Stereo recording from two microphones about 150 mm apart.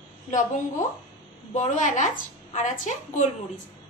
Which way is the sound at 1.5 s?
55° left (ahead or behind).